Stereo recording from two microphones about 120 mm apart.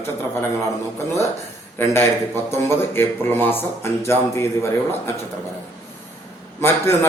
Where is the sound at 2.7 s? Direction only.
20° left (ahead or behind).